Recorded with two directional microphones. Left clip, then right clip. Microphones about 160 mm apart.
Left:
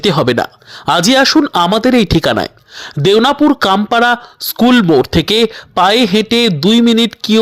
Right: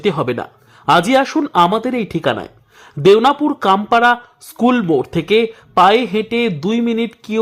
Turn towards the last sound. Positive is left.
turn(degrees=35)  # may be behind; listen again after turning